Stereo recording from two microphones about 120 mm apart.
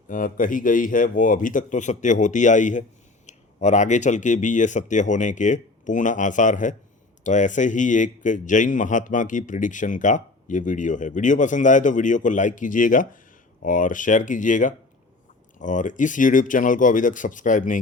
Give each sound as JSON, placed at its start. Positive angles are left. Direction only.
{"t": 0.1, "sound": "speech", "side_deg": 90}